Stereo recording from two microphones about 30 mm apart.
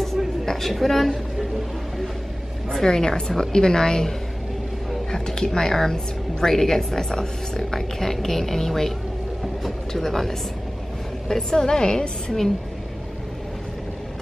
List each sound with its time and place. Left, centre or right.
0.0 s a sound: centre
2.8 s a woman's voice: centre
5.1 s a woman's voice: left
7.1 s a woman's voice: left
8.0 s a woman's voice: centre
11.2 s a woman's voice: left